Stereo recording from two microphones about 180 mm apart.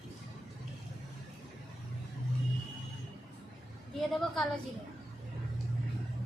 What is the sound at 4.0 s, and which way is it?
Speech, centre (ahead or behind).